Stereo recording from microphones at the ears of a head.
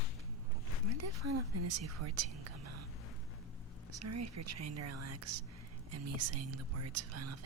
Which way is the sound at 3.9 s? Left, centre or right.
Right.